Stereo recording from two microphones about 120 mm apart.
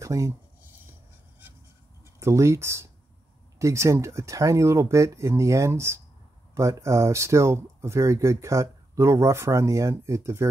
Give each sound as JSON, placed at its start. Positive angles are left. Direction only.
{"t": 0.0, "sound": "speech", "side_deg": -25}
{"t": 2.1, "sound": "speech", "side_deg": -25}